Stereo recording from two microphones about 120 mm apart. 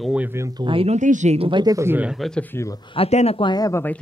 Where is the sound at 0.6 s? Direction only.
50° right (ahead or behind).